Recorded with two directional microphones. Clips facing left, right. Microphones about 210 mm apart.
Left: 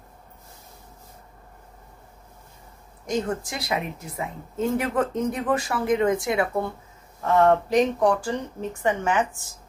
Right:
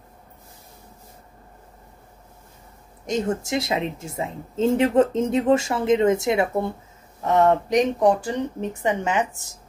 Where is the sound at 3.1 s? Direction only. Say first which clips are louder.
Right 3 dB; 25° right (ahead or behind).